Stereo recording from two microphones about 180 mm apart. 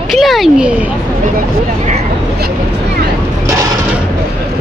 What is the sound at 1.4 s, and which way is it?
Speech, 40° right (ahead or behind).